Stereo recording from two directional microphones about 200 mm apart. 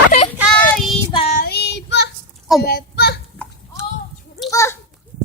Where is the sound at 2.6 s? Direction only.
50° left (ahead or behind).